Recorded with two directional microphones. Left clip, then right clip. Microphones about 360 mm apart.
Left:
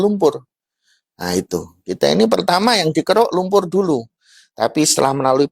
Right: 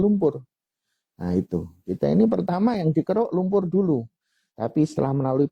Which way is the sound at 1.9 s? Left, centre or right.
Centre.